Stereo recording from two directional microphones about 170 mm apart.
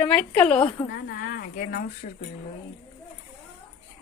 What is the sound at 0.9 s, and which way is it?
Speech, 65° left (ahead or behind).